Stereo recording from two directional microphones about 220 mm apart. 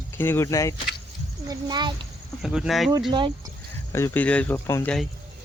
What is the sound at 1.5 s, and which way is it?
Speech, 20° right (ahead or behind).